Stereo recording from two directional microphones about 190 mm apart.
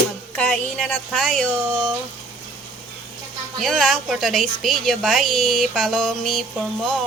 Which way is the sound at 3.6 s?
Centre (ahead or behind).